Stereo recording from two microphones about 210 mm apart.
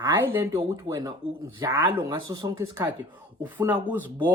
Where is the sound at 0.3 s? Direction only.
15° right (ahead or behind).